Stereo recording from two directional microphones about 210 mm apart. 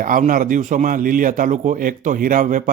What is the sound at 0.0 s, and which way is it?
A man's voice, 40° right (ahead or behind).